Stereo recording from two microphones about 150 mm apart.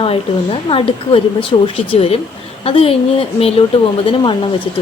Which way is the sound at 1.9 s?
40° left (ahead or behind).